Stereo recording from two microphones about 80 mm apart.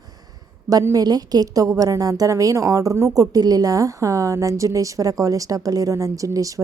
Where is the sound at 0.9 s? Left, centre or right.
Right.